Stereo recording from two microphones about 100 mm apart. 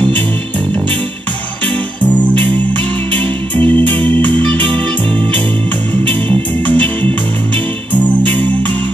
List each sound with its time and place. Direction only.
2.3 s music: 15° left (ahead or behind)
6.0 s music: 15° left (ahead or behind)